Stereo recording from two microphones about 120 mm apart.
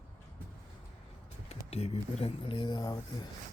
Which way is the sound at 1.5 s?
60° left (ahead or behind).